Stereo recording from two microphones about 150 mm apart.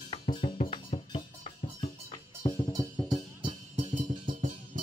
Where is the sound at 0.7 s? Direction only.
40° left (ahead or behind).